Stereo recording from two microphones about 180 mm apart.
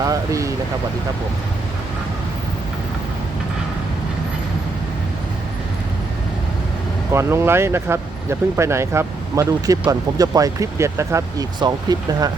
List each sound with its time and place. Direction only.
0.0 s speech: 20° right (ahead or behind)
7.1 s speech: 15° right (ahead or behind)